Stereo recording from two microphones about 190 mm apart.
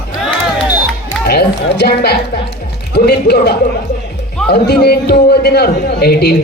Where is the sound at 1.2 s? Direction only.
60° left (ahead or behind).